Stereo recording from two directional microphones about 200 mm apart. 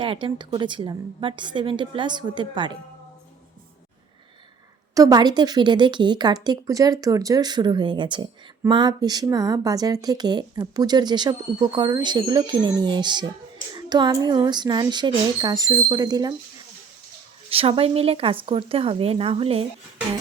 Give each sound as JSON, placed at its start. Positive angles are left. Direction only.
{"t": 0.0, "sound": "speech", "side_deg": -25}
{"t": 4.9, "sound": "speech", "side_deg": -20}
{"t": 17.5, "sound": "speech", "side_deg": -30}